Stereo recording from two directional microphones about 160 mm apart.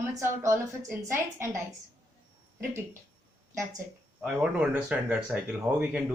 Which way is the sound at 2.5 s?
15° right (ahead or behind).